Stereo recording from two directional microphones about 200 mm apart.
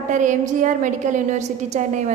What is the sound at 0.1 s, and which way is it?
A woman's voice, 40° right (ahead or behind).